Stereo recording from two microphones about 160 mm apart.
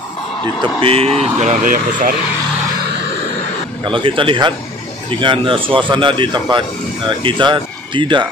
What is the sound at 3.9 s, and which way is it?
Speech, 30° right (ahead or behind).